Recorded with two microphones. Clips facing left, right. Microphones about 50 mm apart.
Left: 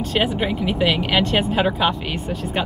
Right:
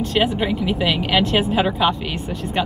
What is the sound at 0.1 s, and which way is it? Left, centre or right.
Speech, centre.